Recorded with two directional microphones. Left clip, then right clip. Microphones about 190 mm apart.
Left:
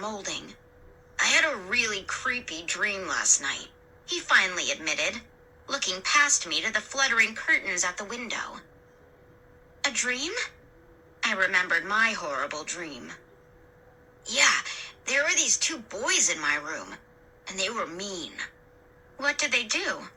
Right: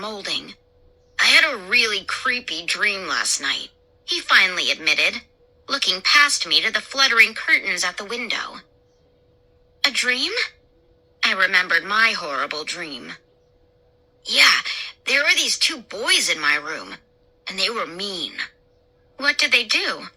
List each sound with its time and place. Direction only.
0.0 s speech: 30° right (ahead or behind)
9.8 s speech: 30° right (ahead or behind)
14.3 s speech: 30° right (ahead or behind)